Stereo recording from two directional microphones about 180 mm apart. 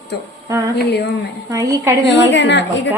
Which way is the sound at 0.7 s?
65° left (ahead or behind).